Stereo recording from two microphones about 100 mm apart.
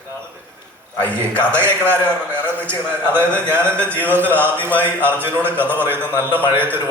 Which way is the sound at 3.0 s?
25° right (ahead or behind).